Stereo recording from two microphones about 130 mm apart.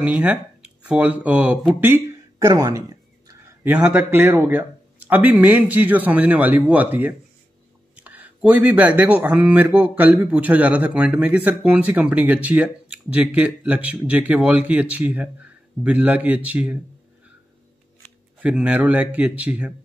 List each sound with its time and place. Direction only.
0.0 s speech: 10° right (ahead or behind)
2.3 s a sound: 30° right (ahead or behind)
3.6 s speech: 10° right (ahead or behind)
18.4 s speech: 10° right (ahead or behind)